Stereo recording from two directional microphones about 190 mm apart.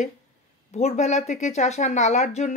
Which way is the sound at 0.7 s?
35° left (ahead or behind).